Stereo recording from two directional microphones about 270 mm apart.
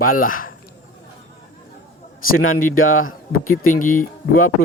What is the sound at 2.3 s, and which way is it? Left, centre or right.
Speech, left.